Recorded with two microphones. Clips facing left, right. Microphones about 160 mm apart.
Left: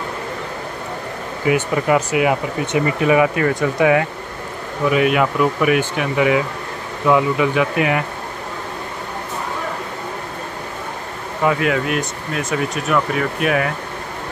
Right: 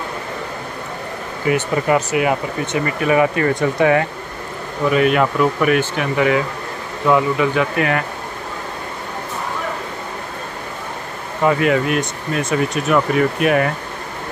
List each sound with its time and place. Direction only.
1.5 s speech: 10° left (ahead or behind)
11.4 s speech: centre (ahead or behind)